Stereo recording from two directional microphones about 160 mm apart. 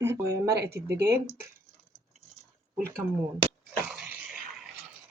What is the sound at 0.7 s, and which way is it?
Speech, 90° right.